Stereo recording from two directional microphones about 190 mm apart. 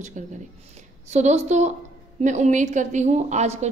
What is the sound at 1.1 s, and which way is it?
A woman's voice, 35° right (ahead or behind).